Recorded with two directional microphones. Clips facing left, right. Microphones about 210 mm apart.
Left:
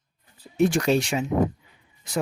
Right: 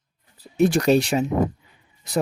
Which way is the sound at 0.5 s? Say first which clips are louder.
Right 3 dB; 40° right (ahead or behind).